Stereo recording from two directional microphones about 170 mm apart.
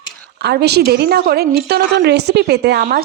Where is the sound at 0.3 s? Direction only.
80° right.